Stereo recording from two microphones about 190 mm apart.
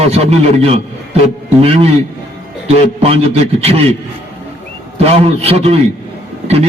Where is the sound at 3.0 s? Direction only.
30° right (ahead or behind).